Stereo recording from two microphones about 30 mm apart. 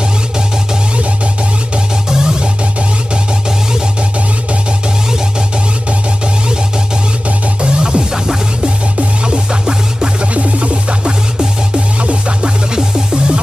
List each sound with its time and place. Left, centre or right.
2.0 s music: right
7.6 s music: right
9.2 s music: right
10.3 s music: right
12.7 s music: right